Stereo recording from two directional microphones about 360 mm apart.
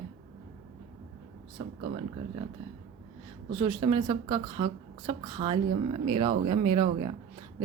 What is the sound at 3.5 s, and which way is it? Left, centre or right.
Speech, centre.